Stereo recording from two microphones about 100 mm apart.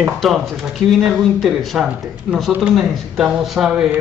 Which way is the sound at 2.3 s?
10° right (ahead or behind).